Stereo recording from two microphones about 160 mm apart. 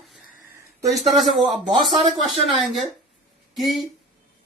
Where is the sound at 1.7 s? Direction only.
30° right (ahead or behind).